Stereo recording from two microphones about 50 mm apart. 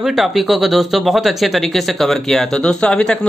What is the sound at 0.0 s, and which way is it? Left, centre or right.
Speech, centre.